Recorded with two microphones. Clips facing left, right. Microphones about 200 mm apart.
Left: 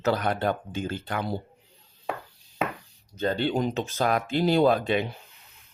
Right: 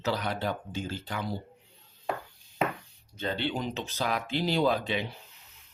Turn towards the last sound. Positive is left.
turn(degrees=50)  # may be behind; listen again after turning